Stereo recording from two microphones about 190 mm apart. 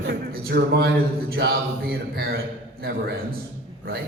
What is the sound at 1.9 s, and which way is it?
Speech, 55° right (ahead or behind).